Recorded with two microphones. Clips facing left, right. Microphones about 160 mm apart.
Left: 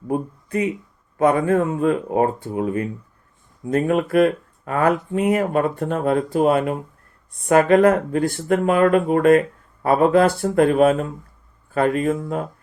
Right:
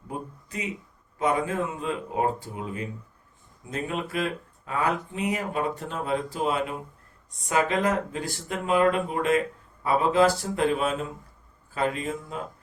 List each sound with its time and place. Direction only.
0.1 s speech: 55° left (ahead or behind)